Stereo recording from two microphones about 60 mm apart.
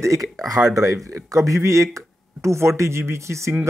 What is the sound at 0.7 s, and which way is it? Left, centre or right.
Speech, right.